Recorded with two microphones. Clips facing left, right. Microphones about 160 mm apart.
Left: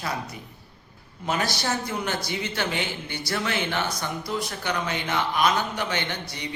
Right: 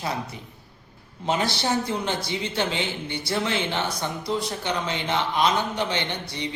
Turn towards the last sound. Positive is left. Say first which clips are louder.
# right 1 dB
turn(degrees=-25)  # may be behind; listen again after turning